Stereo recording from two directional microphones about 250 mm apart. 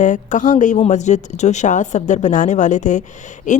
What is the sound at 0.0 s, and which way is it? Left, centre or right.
A woman's voice, left.